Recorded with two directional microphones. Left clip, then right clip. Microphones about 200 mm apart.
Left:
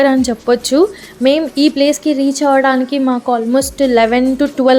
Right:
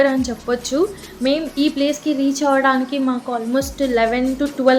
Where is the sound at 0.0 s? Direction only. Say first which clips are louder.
Left 5 dB; 40° left (ahead or behind).